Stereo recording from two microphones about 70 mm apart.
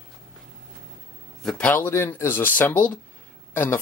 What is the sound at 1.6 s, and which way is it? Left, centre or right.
Speech, left.